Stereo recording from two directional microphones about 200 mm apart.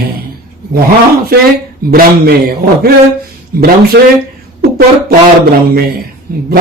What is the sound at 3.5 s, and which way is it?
A man's voice, 50° right (ahead or behind).